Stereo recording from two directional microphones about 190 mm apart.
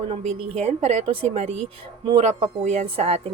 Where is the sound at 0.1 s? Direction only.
30° right (ahead or behind).